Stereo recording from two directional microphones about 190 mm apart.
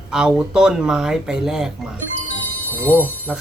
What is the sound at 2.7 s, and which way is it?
Speech, 10° left (ahead or behind).